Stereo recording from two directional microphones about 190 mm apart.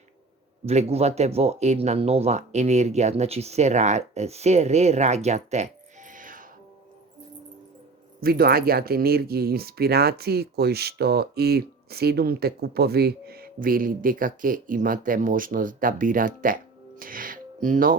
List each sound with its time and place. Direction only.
0.6 s speech: 35° right (ahead or behind)
8.2 s speech: 55° right (ahead or behind)